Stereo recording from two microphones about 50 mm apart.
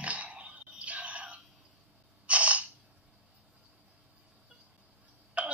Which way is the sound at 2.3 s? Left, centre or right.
Right.